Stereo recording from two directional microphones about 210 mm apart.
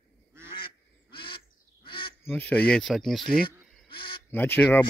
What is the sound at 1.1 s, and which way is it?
Goose, 25° left (ahead or behind).